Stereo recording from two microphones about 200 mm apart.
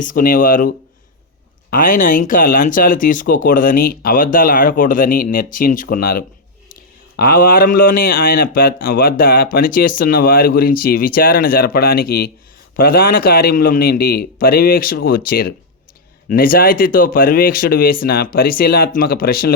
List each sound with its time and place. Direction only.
0.0 s speech: 45° left (ahead or behind)
1.7 s speech: 40° left (ahead or behind)